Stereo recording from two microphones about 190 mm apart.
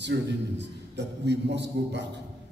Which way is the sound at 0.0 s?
65° right (ahead or behind).